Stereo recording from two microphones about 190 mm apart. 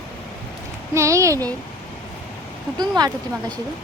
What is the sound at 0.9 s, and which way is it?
Speech, 15° right (ahead or behind).